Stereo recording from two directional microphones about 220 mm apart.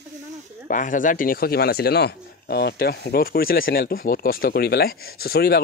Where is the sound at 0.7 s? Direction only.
35° left (ahead or behind).